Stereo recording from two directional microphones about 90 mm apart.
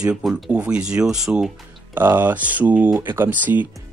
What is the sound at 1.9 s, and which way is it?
Speech, 25° right (ahead or behind).